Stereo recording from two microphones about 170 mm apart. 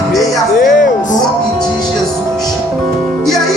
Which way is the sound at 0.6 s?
50° left (ahead or behind).